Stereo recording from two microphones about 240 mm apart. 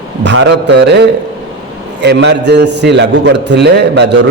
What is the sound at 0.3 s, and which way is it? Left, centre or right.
A man's voice, right.